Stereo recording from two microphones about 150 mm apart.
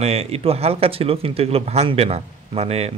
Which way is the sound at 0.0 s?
45° right (ahead or behind).